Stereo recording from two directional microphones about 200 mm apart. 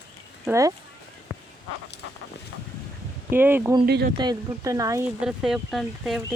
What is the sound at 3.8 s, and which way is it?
Speech, 50° right (ahead or behind).